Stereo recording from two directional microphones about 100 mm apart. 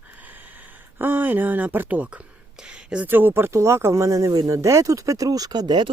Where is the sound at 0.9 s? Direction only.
20° right (ahead or behind).